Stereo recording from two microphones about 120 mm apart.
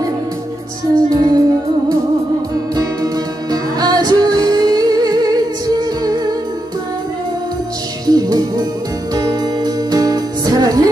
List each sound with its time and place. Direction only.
1.1 s music: 30° right (ahead or behind)
2.7 s music: 35° right (ahead or behind)
8.1 s music: 30° right (ahead or behind)